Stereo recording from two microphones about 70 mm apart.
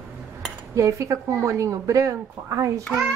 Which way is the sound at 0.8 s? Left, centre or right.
Right.